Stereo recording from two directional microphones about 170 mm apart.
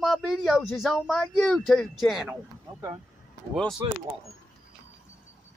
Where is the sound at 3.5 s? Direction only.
Centre (ahead or behind).